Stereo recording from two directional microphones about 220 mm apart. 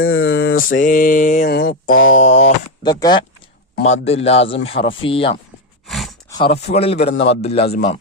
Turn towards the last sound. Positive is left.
turn(degrees=25)  # may be behind; listen again after turning